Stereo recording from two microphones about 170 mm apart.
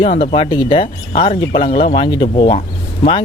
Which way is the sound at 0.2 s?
35° left (ahead or behind).